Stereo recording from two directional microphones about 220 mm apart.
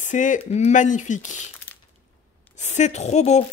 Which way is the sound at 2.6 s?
30° left (ahead or behind).